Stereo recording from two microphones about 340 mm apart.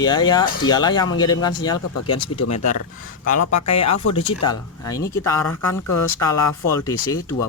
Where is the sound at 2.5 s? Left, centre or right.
Left.